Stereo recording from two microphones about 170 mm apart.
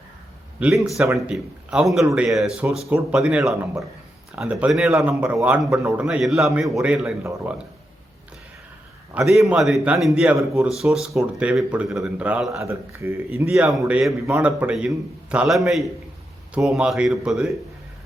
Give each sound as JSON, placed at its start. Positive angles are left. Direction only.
{"t": 0.6, "sound": "a man's voice", "side_deg": 0}
{"t": 9.1, "sound": "a man's voice", "side_deg": 0}
{"t": 12.5, "sound": "a man's voice", "side_deg": -15}
{"t": 13.4, "sound": "a man's voice", "side_deg": -5}